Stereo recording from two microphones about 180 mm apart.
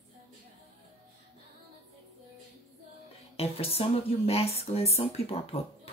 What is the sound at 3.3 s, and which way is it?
Speech, 35° left (ahead or behind).